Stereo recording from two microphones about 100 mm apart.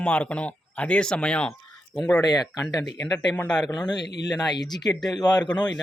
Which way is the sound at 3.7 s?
45° left (ahead or behind).